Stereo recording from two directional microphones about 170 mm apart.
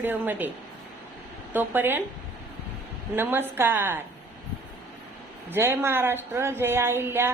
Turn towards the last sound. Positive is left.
turn(degrees=-15)  # may be behind; listen again after turning